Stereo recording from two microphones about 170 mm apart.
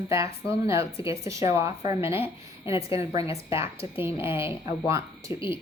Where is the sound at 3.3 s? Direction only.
15° right (ahead or behind).